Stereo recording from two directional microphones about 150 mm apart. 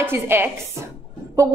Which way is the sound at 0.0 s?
15° right (ahead or behind).